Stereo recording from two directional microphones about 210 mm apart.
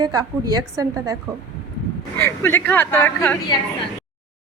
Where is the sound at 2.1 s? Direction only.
10° left (ahead or behind).